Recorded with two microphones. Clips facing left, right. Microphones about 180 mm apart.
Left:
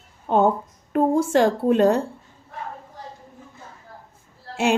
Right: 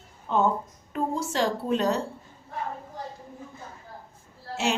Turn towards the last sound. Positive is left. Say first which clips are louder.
# left 7 dB
turn(degrees=55)  # may be behind; listen again after turning